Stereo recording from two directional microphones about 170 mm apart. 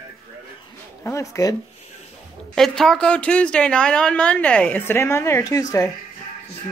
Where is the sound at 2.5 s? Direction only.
5° left (ahead or behind); by 5.8 s 20° left (ahead or behind).